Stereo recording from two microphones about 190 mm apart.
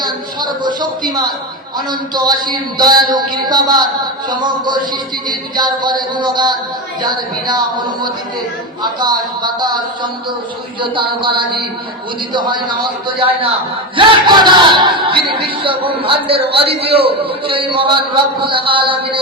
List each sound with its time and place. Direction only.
0.0 s a sound: 20° right (ahead or behind)
1.9 s speech: 20° right (ahead or behind)
8.8 s speech: 20° right (ahead or behind)